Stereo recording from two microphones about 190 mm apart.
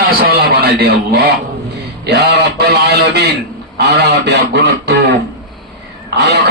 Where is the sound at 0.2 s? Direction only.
55° right (ahead or behind).